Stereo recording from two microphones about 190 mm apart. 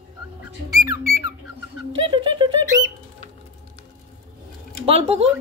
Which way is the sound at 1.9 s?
25° right (ahead or behind).